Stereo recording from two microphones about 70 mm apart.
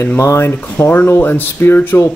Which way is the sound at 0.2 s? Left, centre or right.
Left.